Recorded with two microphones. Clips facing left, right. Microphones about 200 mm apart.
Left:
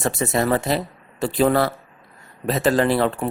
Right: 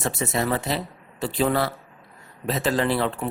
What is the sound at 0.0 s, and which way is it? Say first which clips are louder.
Speech: left 4 dB; 50° left (ahead or behind).